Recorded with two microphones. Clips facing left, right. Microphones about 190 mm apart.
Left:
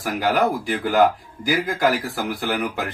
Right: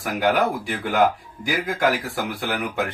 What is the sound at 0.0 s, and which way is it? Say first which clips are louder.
Speech: even; centre (ahead or behind).